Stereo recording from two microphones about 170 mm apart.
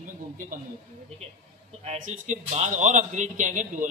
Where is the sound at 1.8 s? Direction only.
45° right (ahead or behind).